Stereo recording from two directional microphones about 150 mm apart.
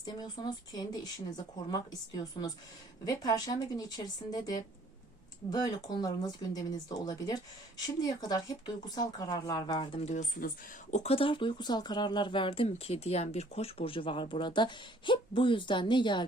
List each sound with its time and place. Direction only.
0.0 s speech: 30° left (ahead or behind)
10.4 s speech: 65° left (ahead or behind)
10.9 s speech: 40° left (ahead or behind)